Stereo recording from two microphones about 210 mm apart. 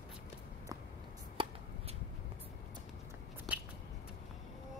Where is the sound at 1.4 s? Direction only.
25° right (ahead or behind).